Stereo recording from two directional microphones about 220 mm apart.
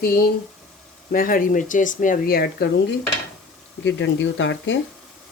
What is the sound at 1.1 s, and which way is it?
Speech, 40° left (ahead or behind).